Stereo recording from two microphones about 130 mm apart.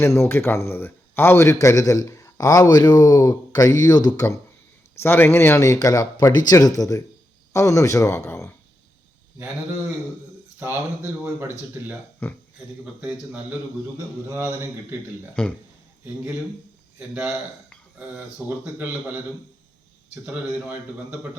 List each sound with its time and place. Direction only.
0.0 s a man's voice: 20° left (ahead or behind)
4.9 s a man's voice: 15° left (ahead or behind)
10.6 s speech: 20° right (ahead or behind)
12.2 s speech: 15° left (ahead or behind)
12.8 s a man's voice: 10° right (ahead or behind)
14.3 s speech: 20° right (ahead or behind)
15.4 s speech: 10° left (ahead or behind)
17.0 s a man's voice: 10° right (ahead or behind)
20.2 s a man's voice: 10° right (ahead or behind)